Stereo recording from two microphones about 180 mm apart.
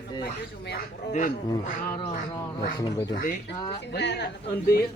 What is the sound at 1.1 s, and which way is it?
Speech, 45° left (ahead or behind).